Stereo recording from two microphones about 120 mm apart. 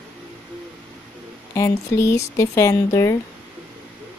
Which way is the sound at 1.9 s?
25° left (ahead or behind).